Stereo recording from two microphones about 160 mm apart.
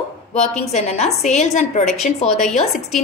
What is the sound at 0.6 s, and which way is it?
A woman's voice, 40° left (ahead or behind).